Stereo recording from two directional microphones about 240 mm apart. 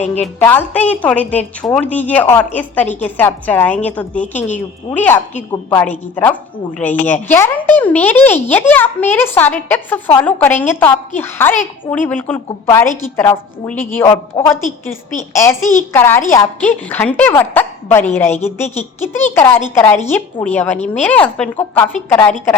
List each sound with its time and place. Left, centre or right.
0.0 s speech: left
0.3 s speech: centre
20.7 s speech: left
21.0 s speech: centre